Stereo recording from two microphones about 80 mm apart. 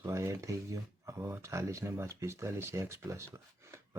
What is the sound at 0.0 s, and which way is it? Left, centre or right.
Speech, right.